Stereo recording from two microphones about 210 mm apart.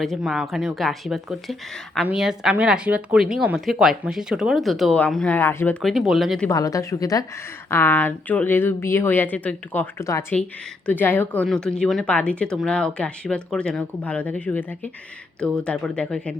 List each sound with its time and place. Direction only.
0.0 s speech: centre (ahead or behind)
5.8 s speech: centre (ahead or behind)
6.5 s a woman's voice: 15° left (ahead or behind)